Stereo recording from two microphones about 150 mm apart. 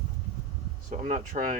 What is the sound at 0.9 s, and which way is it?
Speech, 55° right (ahead or behind).